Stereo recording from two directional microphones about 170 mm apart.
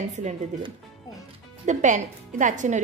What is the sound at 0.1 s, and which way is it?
Speech, 45° right (ahead or behind).